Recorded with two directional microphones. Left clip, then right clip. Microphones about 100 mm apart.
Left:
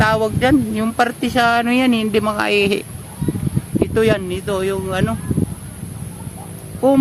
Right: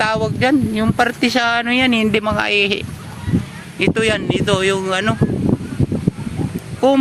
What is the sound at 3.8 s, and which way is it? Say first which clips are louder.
Speech: even; 30° right (ahead or behind).